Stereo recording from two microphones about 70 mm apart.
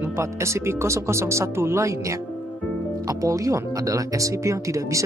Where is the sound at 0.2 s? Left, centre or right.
Right.